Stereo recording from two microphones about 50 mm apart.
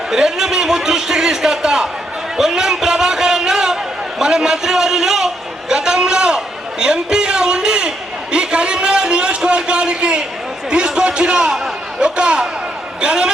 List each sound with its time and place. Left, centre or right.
0.1 s a man's voice: centre
2.4 s a sound: centre
13.0 s a man's voice: centre